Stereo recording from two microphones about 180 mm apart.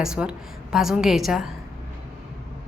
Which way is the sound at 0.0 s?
5° right (ahead or behind).